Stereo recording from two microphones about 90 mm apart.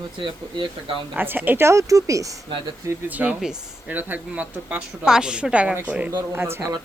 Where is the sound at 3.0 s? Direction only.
20° right (ahead or behind).